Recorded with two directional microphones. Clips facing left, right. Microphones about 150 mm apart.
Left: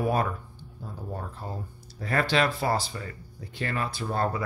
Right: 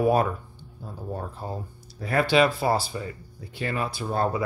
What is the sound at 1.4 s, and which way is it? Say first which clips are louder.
Speech: right 5 dB; 25° right (ahead or behind).